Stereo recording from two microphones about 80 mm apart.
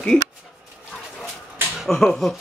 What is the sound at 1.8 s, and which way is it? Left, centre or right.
Speech, centre.